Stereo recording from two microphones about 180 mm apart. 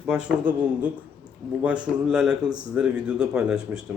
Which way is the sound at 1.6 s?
5° right (ahead or behind).